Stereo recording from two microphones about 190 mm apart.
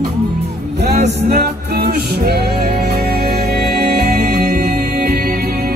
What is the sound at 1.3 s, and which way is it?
Music, 55° right (ahead or behind).